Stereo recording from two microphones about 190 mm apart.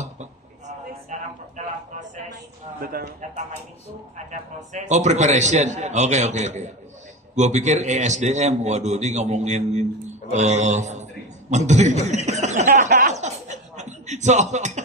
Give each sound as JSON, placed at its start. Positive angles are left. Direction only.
{"t": 2.8, "sound": "a man's voice", "side_deg": -50}
{"t": 4.3, "sound": "a man's voice", "side_deg": -40}